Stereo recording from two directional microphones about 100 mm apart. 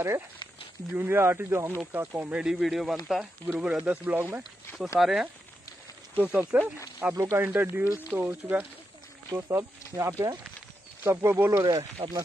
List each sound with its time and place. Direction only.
0.9 s speech: 20° right (ahead or behind)
2.4 s speech: 5° right (ahead or behind)
3.4 s speech: 15° right (ahead or behind)
4.9 s speech: 5° right (ahead or behind)
9.3 s speech: 30° right (ahead or behind)
11.6 s speech: 45° right (ahead or behind)